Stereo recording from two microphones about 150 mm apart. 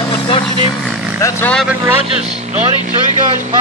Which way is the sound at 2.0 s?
45° right (ahead or behind).